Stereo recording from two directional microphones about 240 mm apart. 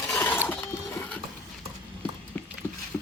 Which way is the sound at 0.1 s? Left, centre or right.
Centre.